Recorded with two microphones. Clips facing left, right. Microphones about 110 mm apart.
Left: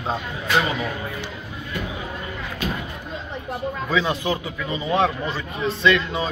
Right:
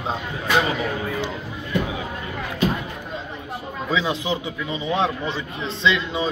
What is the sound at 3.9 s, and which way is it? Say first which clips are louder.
A man's voice: even; 15° right (ahead or behind).